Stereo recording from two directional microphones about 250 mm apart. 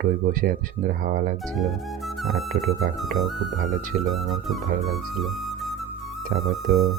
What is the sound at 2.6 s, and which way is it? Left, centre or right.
Music, centre.